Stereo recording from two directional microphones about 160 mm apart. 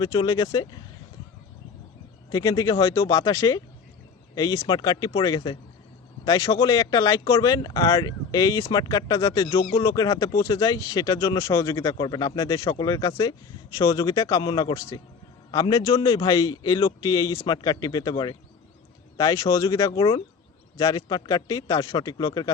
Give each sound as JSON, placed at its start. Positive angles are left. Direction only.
{"t": 0.0, "sound": "speech", "side_deg": 25}
{"t": 2.3, "sound": "speech", "side_deg": 20}